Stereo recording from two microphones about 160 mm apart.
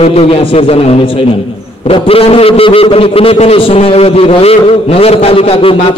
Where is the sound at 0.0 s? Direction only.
40° left (ahead or behind).